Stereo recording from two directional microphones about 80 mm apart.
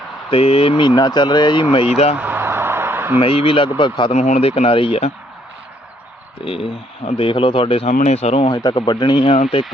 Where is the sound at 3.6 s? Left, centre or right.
Left.